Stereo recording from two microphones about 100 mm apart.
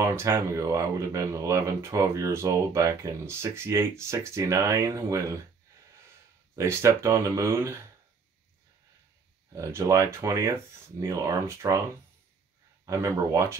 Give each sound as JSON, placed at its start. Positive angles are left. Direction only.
{"t": 0.0, "sound": "speech", "side_deg": -25}
{"t": 6.5, "sound": "speech", "side_deg": -30}
{"t": 9.6, "sound": "speech", "side_deg": -30}
{"t": 12.8, "sound": "speech", "side_deg": -30}